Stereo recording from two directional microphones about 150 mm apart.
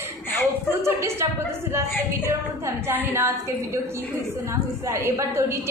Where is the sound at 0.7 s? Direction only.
15° right (ahead or behind).